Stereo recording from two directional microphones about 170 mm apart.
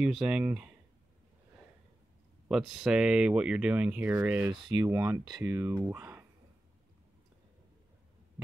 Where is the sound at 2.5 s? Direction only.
5° right (ahead or behind).